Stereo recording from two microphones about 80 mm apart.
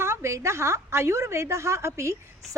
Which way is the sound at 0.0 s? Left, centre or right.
Right.